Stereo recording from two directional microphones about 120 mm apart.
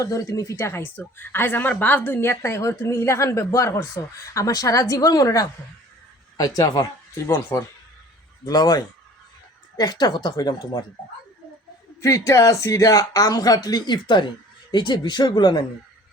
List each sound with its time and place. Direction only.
0.0 s speech: 30° left (ahead or behind)
8.4 s speech: 35° left (ahead or behind)
12.0 s speech: 25° left (ahead or behind)